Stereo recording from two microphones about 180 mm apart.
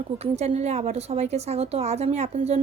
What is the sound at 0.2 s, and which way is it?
A woman's voice, 35° right (ahead or behind).